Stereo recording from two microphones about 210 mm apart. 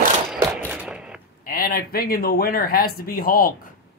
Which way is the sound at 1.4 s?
45° left (ahead or behind).